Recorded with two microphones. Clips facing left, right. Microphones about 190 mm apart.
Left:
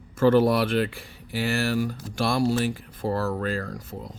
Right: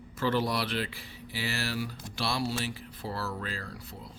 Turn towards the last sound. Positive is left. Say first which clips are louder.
# left 9 dB
turn(degrees=45)  # may be behind; listen again after turning